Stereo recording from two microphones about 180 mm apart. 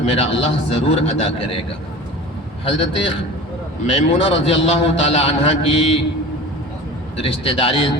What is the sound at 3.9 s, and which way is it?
A man's voice, 35° left (ahead or behind).